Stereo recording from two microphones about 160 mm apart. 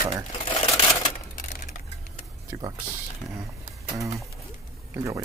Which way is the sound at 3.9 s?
20° right (ahead or behind).